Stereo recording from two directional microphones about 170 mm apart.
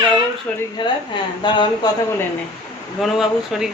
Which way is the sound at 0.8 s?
25° left (ahead or behind).